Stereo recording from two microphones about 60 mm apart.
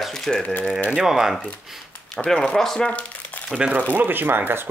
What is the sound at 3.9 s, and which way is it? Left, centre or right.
Speech, right.